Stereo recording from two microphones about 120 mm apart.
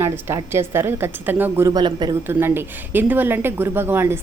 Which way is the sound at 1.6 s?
35° right (ahead or behind).